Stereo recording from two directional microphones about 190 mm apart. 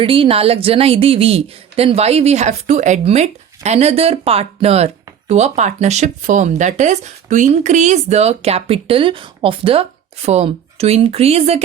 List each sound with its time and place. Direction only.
0.0 s a woman's voice: 30° right (ahead or behind)